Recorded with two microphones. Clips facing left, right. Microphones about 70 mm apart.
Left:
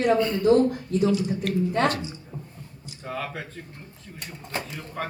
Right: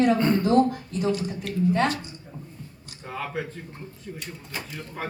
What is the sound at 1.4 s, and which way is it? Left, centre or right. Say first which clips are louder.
Speech: left 6 dB; left.